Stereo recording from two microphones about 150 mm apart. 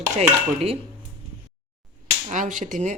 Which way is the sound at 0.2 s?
45° right (ahead or behind).